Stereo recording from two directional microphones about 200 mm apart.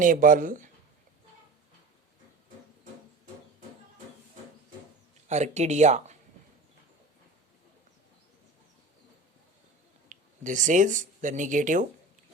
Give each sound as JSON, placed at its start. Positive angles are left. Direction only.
{"t": 0.0, "sound": "speech", "side_deg": -45}
{"t": 5.3, "sound": "speech", "side_deg": -35}
{"t": 10.1, "sound": "speech", "side_deg": -40}